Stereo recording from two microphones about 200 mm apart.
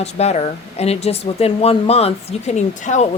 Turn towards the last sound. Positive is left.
turn(degrees=35)  # may be behind; listen again after turning